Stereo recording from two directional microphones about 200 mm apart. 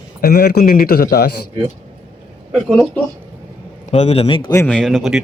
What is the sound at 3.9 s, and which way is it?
Speech, 30° left (ahead or behind).